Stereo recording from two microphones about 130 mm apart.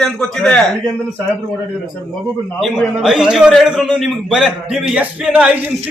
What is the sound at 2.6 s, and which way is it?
A man's voice, 5° right (ahead or behind).